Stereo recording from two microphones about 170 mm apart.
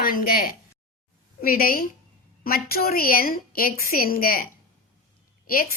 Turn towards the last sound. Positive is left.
turn(degrees=55)  # may be behind; listen again after turning